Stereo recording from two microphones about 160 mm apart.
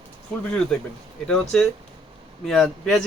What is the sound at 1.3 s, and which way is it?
Speech, 5° left (ahead or behind).